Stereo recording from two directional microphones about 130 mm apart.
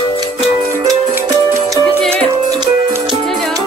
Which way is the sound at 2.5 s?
30° right (ahead or behind).